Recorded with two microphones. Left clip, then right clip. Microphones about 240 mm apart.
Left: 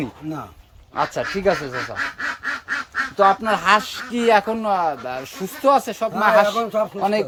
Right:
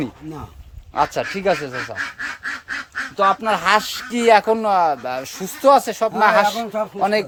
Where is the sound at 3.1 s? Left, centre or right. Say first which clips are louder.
Even; centre.